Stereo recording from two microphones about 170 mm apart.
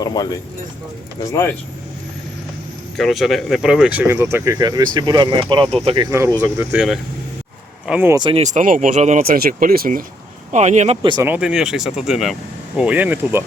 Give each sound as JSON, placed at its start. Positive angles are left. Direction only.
{"t": 0.0, "sound": "speech", "side_deg": 20}
{"t": 1.3, "sound": "speech", "side_deg": 15}
{"t": 3.0, "sound": "speech", "side_deg": 0}
{"t": 6.1, "sound": "speech", "side_deg": -15}
{"t": 7.9, "sound": "speech", "side_deg": -10}
{"t": 8.1, "sound": "speech", "side_deg": -30}
{"t": 8.4, "sound": "speech", "side_deg": -50}
{"t": 9.2, "sound": "speech", "side_deg": -55}
{"t": 10.5, "sound": "speech", "side_deg": -45}
{"t": 11.2, "sound": "speech", "side_deg": -10}